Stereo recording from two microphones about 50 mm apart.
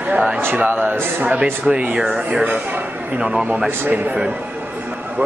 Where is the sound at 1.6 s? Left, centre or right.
Right.